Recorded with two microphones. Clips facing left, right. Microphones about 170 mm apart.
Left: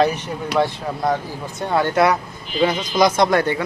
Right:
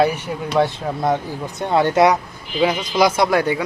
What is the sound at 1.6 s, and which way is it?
Speech, 20° right (ahead or behind).